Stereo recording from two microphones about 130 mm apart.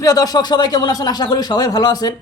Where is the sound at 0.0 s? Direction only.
30° left (ahead or behind).